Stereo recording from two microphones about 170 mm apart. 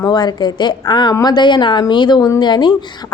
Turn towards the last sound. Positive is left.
turn(degrees=25)  # may be behind; listen again after turning